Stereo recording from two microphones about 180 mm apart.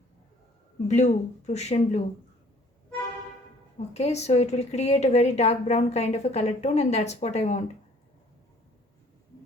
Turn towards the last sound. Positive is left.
turn(degrees=40)  # may be behind; listen again after turning